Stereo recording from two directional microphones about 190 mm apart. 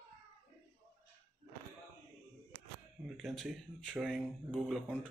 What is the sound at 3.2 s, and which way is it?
Speech, centre (ahead or behind).